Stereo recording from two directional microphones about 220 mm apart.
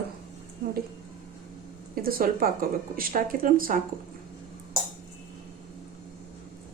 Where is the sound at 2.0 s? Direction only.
40° right (ahead or behind).